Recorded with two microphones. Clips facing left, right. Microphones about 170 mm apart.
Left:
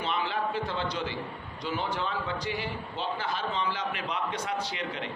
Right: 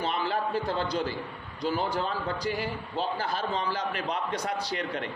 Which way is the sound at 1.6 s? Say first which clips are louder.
Right 3 dB; 40° right (ahead or behind).